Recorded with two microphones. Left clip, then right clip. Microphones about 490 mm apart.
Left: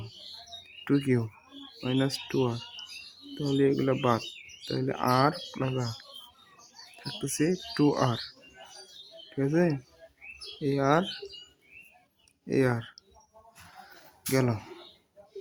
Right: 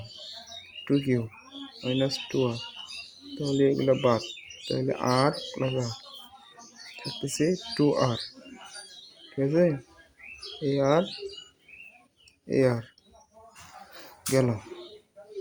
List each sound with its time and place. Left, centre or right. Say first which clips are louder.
0.9 s speech: right 1 dB; left
7.2 s speech: right 2 dB; left
9.4 s speech: right 3 dB; left
12.5 s speech: right 3 dB; left
14.3 s speech: right 3 dB; left